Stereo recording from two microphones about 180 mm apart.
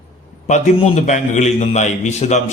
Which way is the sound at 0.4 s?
40° left (ahead or behind).